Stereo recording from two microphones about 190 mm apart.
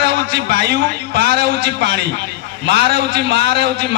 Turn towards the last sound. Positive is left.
turn(degrees=-60)  # may be behind; listen again after turning